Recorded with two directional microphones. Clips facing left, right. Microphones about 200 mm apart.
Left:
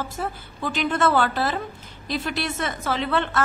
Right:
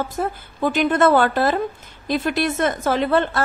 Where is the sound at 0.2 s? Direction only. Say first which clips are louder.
Right 9 dB; 50° right (ahead or behind).